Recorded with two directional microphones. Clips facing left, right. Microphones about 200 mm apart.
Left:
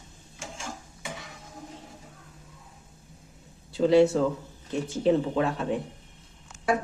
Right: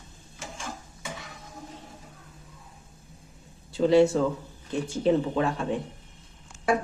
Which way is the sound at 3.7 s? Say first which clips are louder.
Even; centre (ahead or behind).